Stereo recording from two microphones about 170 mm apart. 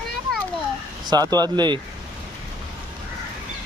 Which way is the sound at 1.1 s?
25° right (ahead or behind).